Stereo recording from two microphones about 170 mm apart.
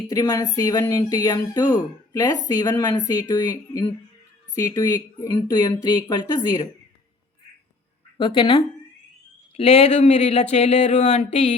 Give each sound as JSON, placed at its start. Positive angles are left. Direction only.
{"t": 0.1, "sound": "speech", "side_deg": 20}
{"t": 8.2, "sound": "speech", "side_deg": 30}